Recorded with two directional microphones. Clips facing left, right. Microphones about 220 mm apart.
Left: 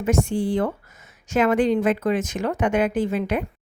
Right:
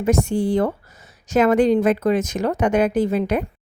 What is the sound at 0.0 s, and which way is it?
A woman's voice, 40° right (ahead or behind).